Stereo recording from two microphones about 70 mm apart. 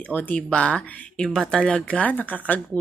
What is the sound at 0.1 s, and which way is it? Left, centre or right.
A woman's voice, left.